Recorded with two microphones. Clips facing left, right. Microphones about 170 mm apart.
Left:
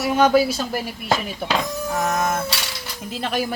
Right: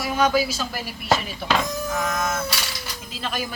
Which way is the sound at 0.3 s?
60° left (ahead or behind).